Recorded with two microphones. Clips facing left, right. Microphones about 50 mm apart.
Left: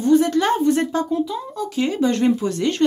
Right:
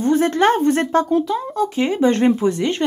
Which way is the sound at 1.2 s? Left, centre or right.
Right.